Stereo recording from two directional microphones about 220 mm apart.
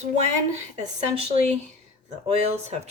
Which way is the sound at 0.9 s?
30° right (ahead or behind).